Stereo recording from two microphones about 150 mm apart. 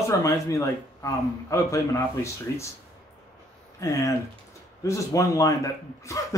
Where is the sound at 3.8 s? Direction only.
20° left (ahead or behind).